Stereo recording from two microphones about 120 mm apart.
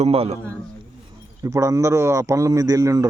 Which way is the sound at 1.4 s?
25° right (ahead or behind).